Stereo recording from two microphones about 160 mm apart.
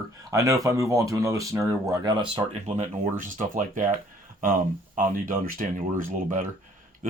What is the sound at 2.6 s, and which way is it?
Speech, 50° right (ahead or behind).